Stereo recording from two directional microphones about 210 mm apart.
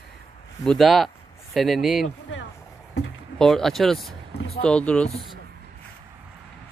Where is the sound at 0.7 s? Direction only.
Centre (ahead or behind).